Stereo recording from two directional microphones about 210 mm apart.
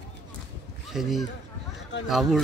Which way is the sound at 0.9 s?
Centre (ahead or behind).